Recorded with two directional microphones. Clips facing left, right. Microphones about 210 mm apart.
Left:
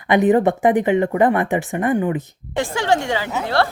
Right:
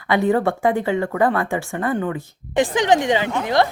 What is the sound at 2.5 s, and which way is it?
A woman's voice, 15° right (ahead or behind).